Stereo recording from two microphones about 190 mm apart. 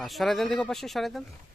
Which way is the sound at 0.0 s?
Centre (ahead or behind).